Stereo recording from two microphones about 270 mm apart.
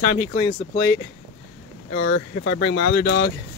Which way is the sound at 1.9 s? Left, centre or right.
Left.